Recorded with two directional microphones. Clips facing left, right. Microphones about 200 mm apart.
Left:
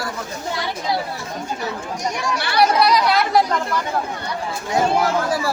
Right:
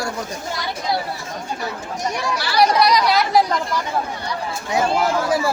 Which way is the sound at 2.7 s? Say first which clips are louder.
Even; 5° left (ahead or behind).